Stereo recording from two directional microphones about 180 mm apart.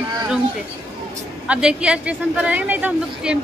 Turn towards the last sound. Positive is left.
turn(degrees=-5)  # may be behind; listen again after turning